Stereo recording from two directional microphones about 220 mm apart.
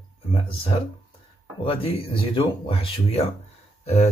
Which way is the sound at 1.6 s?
25° left (ahead or behind).